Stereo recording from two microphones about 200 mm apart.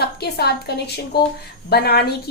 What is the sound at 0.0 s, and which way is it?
A woman's voice, 50° left (ahead or behind).